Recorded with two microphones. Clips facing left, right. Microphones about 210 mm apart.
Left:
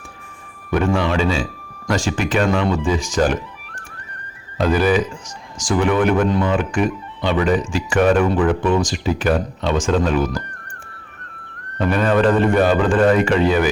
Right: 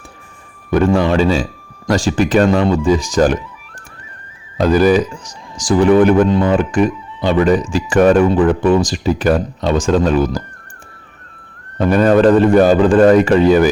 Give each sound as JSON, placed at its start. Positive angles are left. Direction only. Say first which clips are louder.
{"t": 0.7, "sound": "speech", "louder": "right 5 dB", "side_deg": -40}
{"t": 4.5, "sound": "speech", "louder": "right 5 dB", "side_deg": -40}
{"t": 11.8, "sound": "speech", "louder": "right 6 dB", "side_deg": -40}